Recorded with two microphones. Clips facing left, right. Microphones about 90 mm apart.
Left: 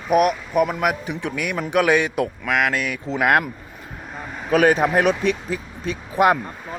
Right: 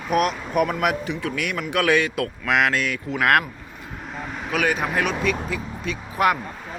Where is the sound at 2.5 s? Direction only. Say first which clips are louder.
Right 3 dB; centre (ahead or behind).